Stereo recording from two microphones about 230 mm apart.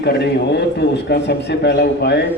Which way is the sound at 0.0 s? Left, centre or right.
Left.